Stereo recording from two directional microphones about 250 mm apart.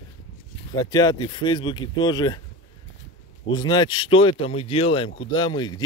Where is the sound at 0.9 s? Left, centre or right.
Centre.